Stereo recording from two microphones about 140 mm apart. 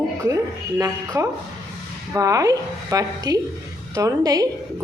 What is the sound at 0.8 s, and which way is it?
Speech, 25° right (ahead or behind).